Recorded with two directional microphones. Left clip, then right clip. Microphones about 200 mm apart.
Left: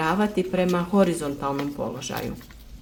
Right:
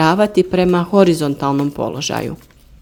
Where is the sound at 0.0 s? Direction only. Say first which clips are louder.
Right 10 dB; 40° right (ahead or behind).